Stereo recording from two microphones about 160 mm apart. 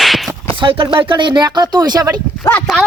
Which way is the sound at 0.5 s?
30° right (ahead or behind).